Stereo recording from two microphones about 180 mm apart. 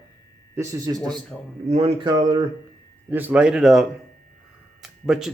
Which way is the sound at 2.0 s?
20° right (ahead or behind).